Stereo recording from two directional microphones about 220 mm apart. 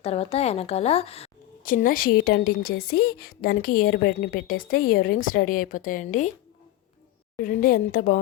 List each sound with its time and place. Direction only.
0.0 s a woman's voice: 25° left (ahead or behind)
7.3 s a woman's voice: 40° left (ahead or behind)